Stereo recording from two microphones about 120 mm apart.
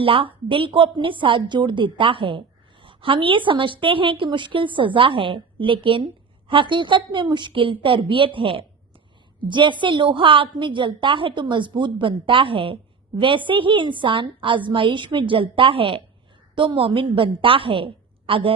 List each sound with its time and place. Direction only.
0.0 s a woman's voice: 50° right (ahead or behind)